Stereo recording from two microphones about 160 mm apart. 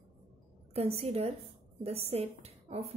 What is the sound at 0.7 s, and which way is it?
A woman's voice, 40° right (ahead or behind).